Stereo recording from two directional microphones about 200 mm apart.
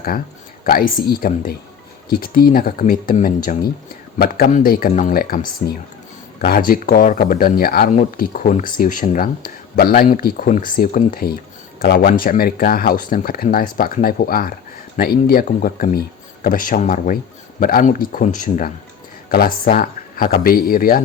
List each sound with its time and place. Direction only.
0.6 s speech: 45° left (ahead or behind)